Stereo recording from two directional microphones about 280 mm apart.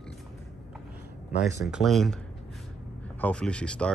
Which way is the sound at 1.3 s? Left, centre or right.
Left.